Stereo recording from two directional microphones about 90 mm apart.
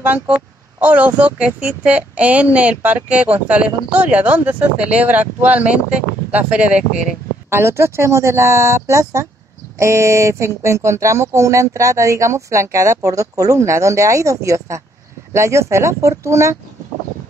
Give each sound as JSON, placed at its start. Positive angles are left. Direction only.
{"t": 0.7, "sound": "a woman's voice", "side_deg": -15}
{"t": 7.4, "sound": "speech", "side_deg": -30}